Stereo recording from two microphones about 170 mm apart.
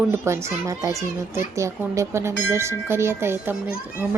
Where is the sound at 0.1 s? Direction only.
15° right (ahead or behind).